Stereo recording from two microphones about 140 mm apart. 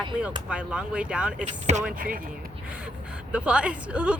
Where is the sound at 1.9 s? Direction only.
85° right.